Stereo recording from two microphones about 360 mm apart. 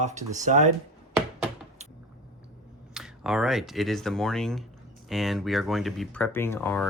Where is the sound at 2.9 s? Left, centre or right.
Centre.